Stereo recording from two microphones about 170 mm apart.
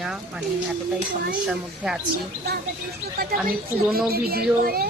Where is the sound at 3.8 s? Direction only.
5° right (ahead or behind).